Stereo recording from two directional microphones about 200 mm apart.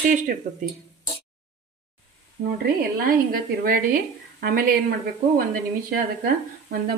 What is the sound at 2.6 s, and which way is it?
A woman's voice, 50° right (ahead or behind).